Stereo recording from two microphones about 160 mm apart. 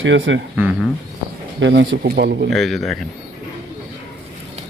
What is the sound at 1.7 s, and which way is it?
Speech, 85° right.